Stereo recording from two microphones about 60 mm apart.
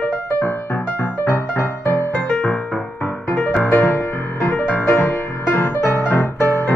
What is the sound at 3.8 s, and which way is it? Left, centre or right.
Music, left.